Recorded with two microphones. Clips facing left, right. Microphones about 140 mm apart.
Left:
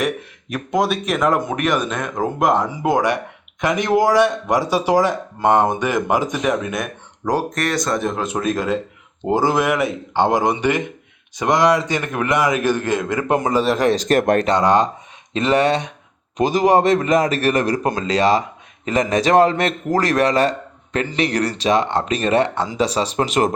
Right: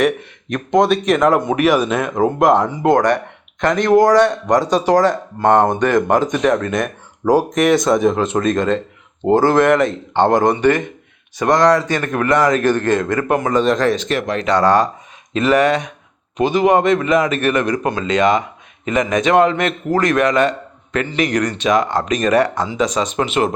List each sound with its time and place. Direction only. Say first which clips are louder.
0.0 s speech: right 5 dB; 5° left (ahead or behind)
7.3 s speech: right 7 dB; 15° right (ahead or behind)
7.9 s speech: right 7 dB; centre (ahead or behind)
13.2 s speech: right 1 dB; 25° left (ahead or behind)
13.5 s speech: right 2 dB; 5° left (ahead or behind)
13.9 s speech: left 4 dB; 40° left (ahead or behind)
14.4 s a man's voice: right 2 dB; 20° left (ahead or behind); by 23.6 s 40° left (ahead or behind)